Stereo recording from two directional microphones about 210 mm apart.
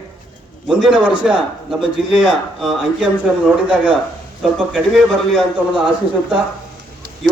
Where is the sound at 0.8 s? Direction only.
5° right (ahead or behind).